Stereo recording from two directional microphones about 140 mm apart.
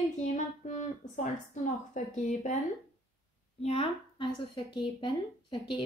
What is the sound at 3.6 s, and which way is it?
Speech, 45° left (ahead or behind).